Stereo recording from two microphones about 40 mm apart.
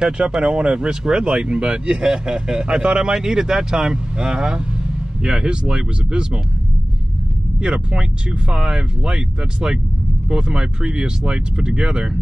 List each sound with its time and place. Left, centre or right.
0.0 s speech: centre
7.9 s speech: right